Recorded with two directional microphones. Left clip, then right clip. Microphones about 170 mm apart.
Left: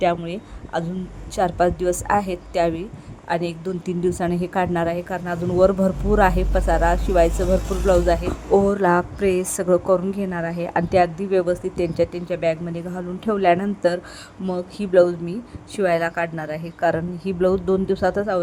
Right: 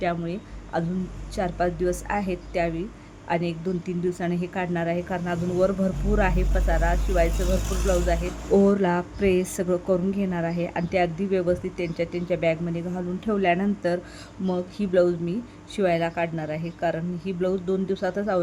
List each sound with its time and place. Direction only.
0.0 s speech: 15° left (ahead or behind)